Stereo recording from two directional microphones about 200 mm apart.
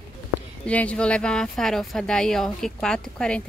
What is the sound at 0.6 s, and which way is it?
Speech, 5° left (ahead or behind).